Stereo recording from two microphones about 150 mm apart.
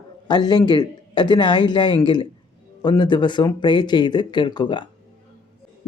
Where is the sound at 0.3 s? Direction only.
30° left (ahead or behind).